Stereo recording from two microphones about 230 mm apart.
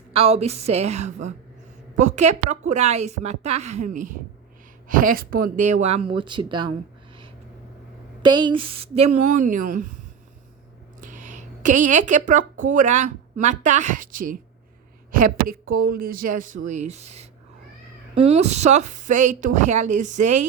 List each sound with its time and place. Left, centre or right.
0.1 s a woman's voice: right
8.2 s speech: centre; by 9.9 s right
11.6 s a woman's voice: right
18.3 s speech: right